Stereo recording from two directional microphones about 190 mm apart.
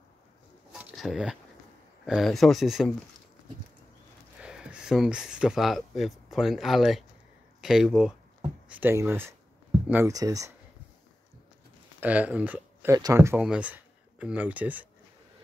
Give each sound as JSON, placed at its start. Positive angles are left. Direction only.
{"t": 0.7, "sound": "a sound", "side_deg": 0}
{"t": 2.0, "sound": "speech", "side_deg": 0}
{"t": 4.4, "sound": "speech", "side_deg": -5}
{"t": 12.0, "sound": "speech", "side_deg": -10}